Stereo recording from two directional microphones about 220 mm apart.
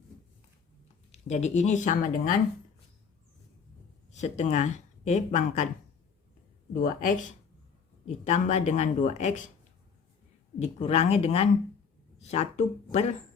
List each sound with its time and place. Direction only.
1.1 s speech: 30° left (ahead or behind)
4.1 s speech: 30° left (ahead or behind)
6.7 s speech: 40° left (ahead or behind)
10.6 s speech: 30° left (ahead or behind)